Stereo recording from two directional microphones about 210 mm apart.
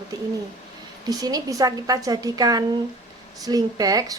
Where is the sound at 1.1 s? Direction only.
15° right (ahead or behind).